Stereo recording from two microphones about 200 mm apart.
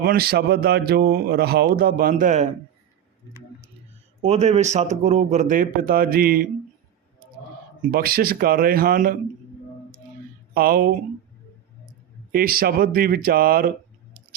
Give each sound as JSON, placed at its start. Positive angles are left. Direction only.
{"t": 0.0, "sound": "speech", "side_deg": -50}
{"t": 4.2, "sound": "speech", "side_deg": -35}
{"t": 7.9, "sound": "speech", "side_deg": -45}
{"t": 10.5, "sound": "speech", "side_deg": -45}
{"t": 12.3, "sound": "speech", "side_deg": -45}